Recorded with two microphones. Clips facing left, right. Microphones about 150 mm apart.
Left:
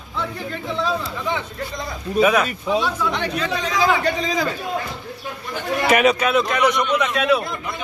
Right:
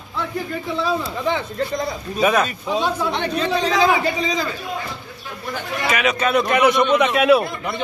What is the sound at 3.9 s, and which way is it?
Speech, 10° right (ahead or behind).